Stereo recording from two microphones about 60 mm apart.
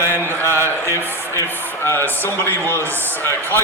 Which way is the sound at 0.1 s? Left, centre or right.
Left.